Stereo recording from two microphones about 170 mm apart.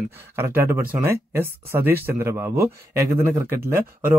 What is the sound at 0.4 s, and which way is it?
Speech, 15° right (ahead or behind).